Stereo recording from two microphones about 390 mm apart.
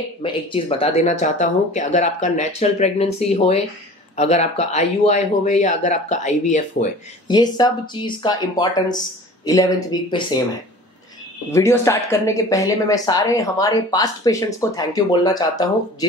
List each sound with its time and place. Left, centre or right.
0.2 s a man's voice: centre
11.5 s a man's voice: centre